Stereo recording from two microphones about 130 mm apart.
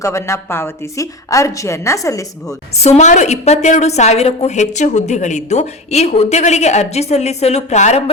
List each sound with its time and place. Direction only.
0.0 s a woman's voice: 20° left (ahead or behind)
2.8 s a woman's voice: 60° left (ahead or behind)